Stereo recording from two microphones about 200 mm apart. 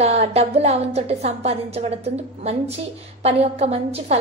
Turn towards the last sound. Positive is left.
turn(degrees=-30)  # may be behind; listen again after turning